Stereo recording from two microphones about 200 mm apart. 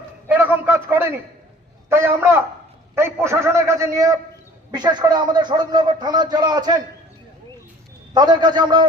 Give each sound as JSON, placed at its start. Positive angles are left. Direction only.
{"t": 0.3, "sound": "a man's voice", "side_deg": -10}
{"t": 8.1, "sound": "a man's voice", "side_deg": -20}